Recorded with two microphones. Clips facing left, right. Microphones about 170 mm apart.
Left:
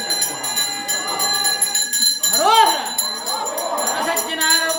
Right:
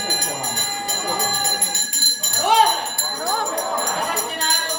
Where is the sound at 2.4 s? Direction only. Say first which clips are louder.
Left 2 dB; 90° left.